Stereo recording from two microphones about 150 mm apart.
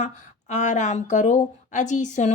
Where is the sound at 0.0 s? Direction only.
50° left (ahead or behind).